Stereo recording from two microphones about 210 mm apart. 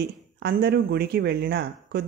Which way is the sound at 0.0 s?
50° right (ahead or behind).